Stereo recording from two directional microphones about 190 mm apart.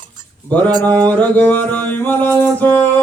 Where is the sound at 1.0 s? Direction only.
10° left (ahead or behind).